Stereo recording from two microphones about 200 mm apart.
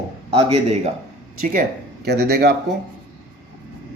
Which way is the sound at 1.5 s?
50° right (ahead or behind).